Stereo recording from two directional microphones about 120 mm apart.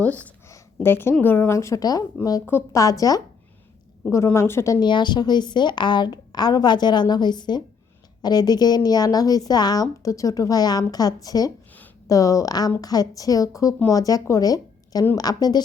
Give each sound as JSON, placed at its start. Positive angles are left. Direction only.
{"t": 0.4, "sound": "a sound", "side_deg": 20}
{"t": 1.2, "sound": "a woman's voice", "side_deg": 15}
{"t": 4.8, "sound": "a woman's voice", "side_deg": 40}